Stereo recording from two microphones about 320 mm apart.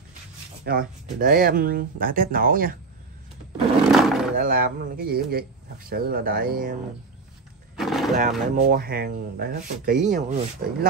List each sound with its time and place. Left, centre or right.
0.7 s speech: right
3.8 s roar: centre
4.4 s speech: right
7.7 s roaring cats: centre
8.5 s speech: right